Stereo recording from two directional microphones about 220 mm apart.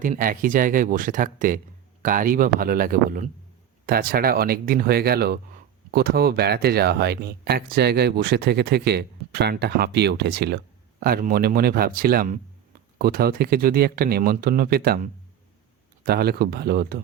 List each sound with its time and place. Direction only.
0.0 s speech: 40° right (ahead or behind)